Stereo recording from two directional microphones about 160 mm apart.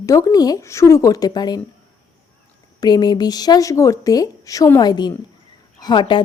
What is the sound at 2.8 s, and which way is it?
Speech, 25° left (ahead or behind).